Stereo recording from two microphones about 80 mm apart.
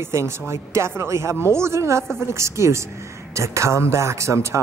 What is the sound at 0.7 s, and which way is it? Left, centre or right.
Speech, right.